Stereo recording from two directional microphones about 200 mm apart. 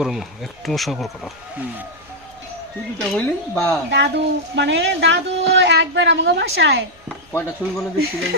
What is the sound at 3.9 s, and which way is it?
Speech, 60° right (ahead or behind).